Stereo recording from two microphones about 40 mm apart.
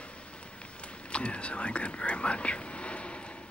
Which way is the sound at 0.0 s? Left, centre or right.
Left.